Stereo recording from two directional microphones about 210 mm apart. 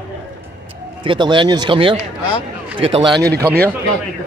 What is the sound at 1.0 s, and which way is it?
Speech, 25° right (ahead or behind).